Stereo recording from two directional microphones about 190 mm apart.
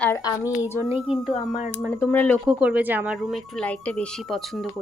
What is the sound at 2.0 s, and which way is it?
Speech, 10° left (ahead or behind).